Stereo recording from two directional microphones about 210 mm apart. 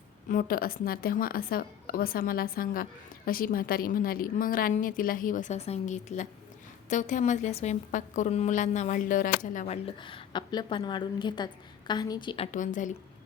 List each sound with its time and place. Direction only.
0.3 s a woman's voice: 45° left (ahead or behind); by 12.5 s 20° left (ahead or behind)
12.5 s a woman's voice: 40° left (ahead or behind)